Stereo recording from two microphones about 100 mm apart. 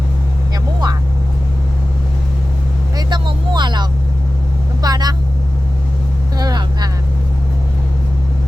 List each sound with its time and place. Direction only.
0.5 s vehicle: 40° right (ahead or behind)
3.1 s vehicle: 50° right (ahead or behind)
6.3 s vehicle: 45° right (ahead or behind)